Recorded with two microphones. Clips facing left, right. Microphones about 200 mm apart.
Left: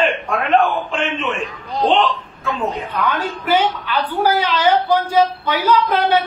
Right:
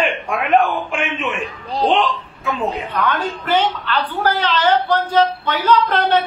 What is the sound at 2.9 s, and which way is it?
A woman's voice, 10° left (ahead or behind).